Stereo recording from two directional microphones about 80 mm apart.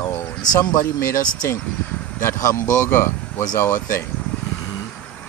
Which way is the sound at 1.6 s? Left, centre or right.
Centre.